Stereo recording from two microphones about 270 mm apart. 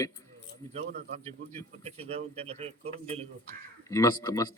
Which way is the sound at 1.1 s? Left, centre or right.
Right.